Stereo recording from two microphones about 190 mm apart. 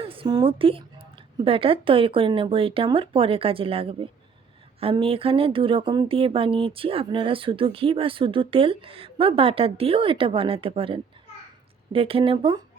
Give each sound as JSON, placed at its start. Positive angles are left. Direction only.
{"t": 0.0, "sound": "speech", "side_deg": -30}